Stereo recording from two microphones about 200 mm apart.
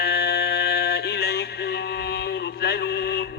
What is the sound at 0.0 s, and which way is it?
Music, 55° left (ahead or behind).